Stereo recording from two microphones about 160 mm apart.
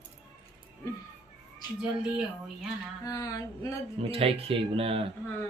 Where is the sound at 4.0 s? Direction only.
35° right (ahead or behind).